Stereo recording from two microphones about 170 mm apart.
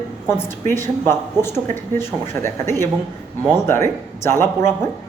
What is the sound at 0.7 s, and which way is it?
Speech, 15° left (ahead or behind).